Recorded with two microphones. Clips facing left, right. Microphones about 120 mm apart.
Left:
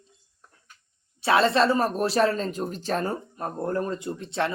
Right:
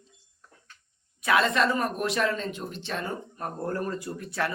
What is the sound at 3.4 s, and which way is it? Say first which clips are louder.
Speech: left 3 dB; 25° left (ahead or behind).